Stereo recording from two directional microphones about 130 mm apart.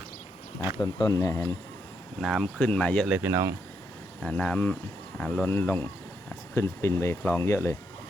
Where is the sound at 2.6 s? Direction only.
10° left (ahead or behind).